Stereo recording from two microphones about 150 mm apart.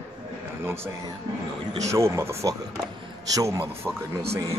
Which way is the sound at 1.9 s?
20° right (ahead or behind).